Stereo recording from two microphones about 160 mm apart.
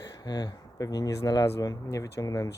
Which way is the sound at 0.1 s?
25° left (ahead or behind).